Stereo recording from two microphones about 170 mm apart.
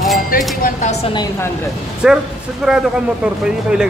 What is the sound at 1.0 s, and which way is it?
Speech, 25° left (ahead or behind).